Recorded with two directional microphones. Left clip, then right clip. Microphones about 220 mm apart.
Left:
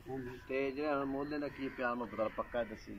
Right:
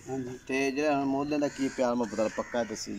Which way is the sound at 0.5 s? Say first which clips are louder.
Right 8 dB; 35° right (ahead or behind).